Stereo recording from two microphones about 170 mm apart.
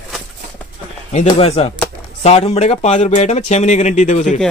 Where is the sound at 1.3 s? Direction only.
35° left (ahead or behind).